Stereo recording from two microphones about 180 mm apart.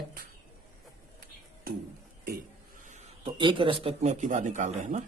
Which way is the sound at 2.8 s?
40° right (ahead or behind).